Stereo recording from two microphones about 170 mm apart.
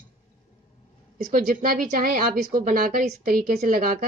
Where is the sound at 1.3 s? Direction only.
60° right (ahead or behind).